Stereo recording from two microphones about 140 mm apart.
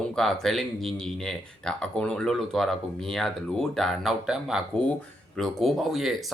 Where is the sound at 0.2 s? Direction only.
5° left (ahead or behind).